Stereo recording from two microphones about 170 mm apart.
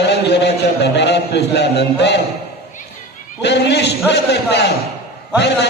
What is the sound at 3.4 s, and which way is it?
A man's voice, 90° left.